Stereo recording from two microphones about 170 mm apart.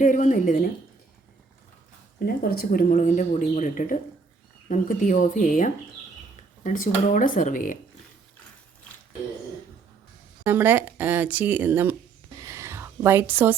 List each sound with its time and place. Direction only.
0.0 s speech: 45° left (ahead or behind)
2.1 s speech: 60° left (ahead or behind)
10.4 s speech: 10° right (ahead or behind)
12.4 s a sound: 15° right (ahead or behind)